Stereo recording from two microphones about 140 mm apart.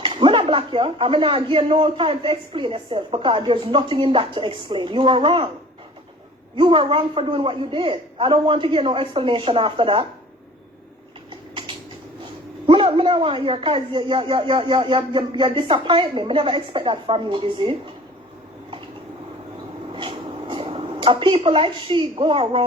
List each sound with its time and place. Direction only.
0.0 s speech: 35° right (ahead or behind)
6.6 s speech: 40° right (ahead or behind)
12.6 s speech: 35° right (ahead or behind)
19.9 s a sound: 35° right (ahead or behind)